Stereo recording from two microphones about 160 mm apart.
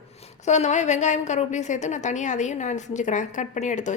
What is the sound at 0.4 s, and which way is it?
A woman's voice, 45° left (ahead or behind).